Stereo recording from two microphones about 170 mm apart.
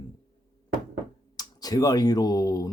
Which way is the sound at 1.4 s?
20° left (ahead or behind).